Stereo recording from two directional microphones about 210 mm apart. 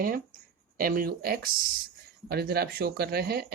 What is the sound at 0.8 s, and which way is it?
Speech, 45° right (ahead or behind).